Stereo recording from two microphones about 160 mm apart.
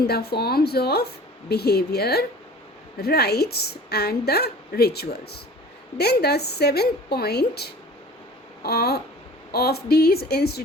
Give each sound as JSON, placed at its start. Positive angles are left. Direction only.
{"t": 0.0, "sound": "a woman's voice", "side_deg": 85}